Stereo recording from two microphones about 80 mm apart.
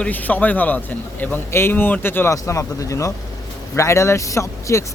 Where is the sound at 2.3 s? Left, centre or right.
Left.